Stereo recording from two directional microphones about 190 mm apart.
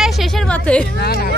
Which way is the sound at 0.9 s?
55° left (ahead or behind).